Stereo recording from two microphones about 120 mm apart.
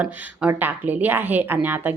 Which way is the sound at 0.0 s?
15° right (ahead or behind).